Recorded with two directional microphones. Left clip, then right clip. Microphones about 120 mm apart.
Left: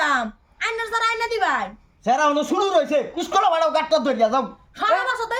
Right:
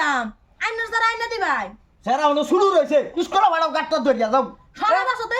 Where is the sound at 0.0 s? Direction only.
15° left (ahead or behind).